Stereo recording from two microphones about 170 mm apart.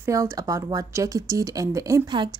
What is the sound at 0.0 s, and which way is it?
Speech, 20° right (ahead or behind).